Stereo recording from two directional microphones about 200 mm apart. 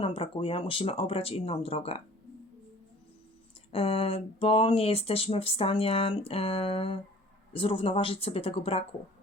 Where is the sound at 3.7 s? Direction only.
30° left (ahead or behind).